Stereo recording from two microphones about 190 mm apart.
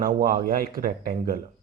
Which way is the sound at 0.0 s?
50° right (ahead or behind).